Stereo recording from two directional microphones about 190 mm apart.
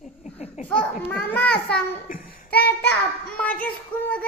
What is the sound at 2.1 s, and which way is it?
Child singing, 45° left (ahead or behind).